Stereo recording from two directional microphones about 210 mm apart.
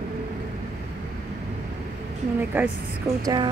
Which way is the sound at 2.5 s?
10° right (ahead or behind).